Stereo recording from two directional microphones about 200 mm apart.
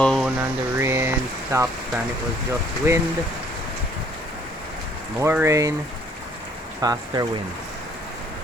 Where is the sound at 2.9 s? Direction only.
15° right (ahead or behind).